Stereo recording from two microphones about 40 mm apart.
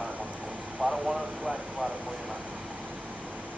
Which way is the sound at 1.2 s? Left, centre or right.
Right.